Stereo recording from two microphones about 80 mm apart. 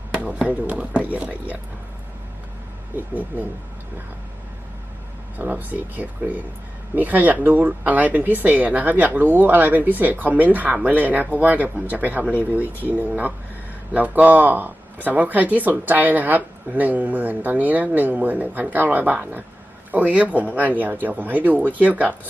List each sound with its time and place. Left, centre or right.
0.1 s a sound: centre
0.4 s speech: centre
2.9 s speech: right
5.4 s speech: right